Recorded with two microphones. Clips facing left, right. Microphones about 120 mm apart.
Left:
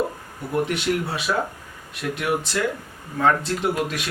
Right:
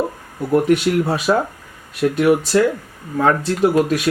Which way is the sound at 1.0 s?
40° right (ahead or behind).